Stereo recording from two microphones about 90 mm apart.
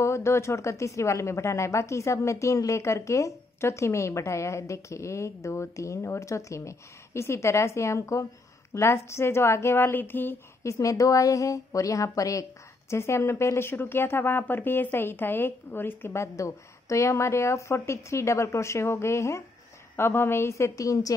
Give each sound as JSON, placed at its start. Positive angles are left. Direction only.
{"t": 0.0, "sound": "a woman's voice", "side_deg": 30}
{"t": 10.6, "sound": "speech", "side_deg": 35}